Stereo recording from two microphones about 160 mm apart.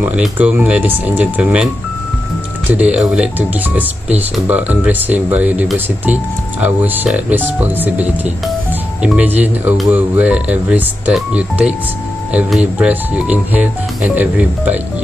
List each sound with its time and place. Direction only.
0.0 s speech: 10° right (ahead or behind)
2.7 s speech: 10° right (ahead or behind)